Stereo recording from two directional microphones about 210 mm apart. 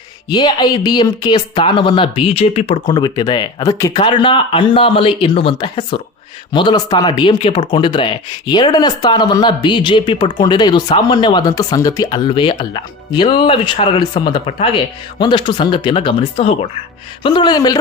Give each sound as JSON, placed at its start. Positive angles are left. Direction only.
{"t": 0.3, "sound": "speech", "side_deg": 20}
{"t": 2.9, "sound": "speech", "side_deg": 20}